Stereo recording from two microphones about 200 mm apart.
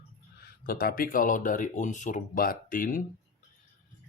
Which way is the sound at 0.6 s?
45° left (ahead or behind).